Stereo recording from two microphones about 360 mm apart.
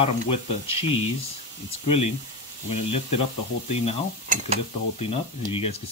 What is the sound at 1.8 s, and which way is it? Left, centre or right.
Speech, centre.